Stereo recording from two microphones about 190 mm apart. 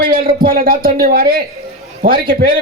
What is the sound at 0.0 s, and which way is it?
A man's voice, 50° right (ahead or behind).